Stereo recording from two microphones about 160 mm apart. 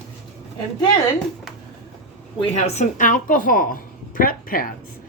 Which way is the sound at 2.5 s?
45° left (ahead or behind).